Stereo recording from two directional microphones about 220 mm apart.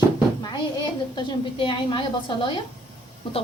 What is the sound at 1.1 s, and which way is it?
A woman's voice, 20° left (ahead or behind).